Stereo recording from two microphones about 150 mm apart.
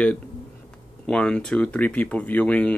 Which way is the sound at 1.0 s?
5° left (ahead or behind).